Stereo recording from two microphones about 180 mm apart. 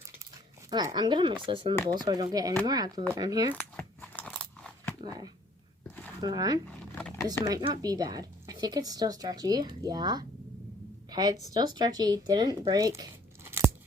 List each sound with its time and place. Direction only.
0.7 s speech: 20° right (ahead or behind)
1.7 s speech: 10° left (ahead or behind)
2.0 s speech: 20° right (ahead or behind)
3.5 s a sound: 10° left (ahead or behind)
4.9 s speech: 20° right (ahead or behind)
6.7 s a sound: 10° left (ahead or behind)
7.4 s a woman's voice: 20° right (ahead or behind)